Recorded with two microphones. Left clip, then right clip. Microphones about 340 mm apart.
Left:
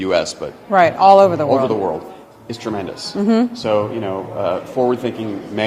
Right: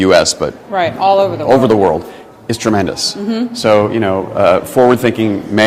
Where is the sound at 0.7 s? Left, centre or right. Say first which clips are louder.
Left 3 dB; left.